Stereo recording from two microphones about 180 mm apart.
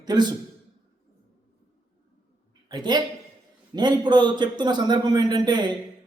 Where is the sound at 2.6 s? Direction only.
20° right (ahead or behind).